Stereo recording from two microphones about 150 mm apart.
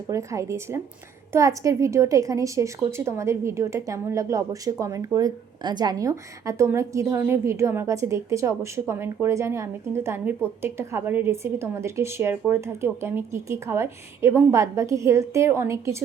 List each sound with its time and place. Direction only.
0.1 s a woman's voice: 20° right (ahead or behind)